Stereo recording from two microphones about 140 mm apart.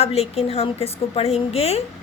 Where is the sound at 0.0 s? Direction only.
50° left (ahead or behind).